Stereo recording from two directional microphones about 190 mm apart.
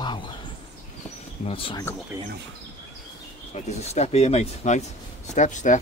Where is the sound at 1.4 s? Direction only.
30° left (ahead or behind).